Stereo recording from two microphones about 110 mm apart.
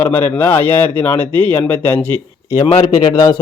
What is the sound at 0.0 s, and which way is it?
A man's voice, 20° left (ahead or behind).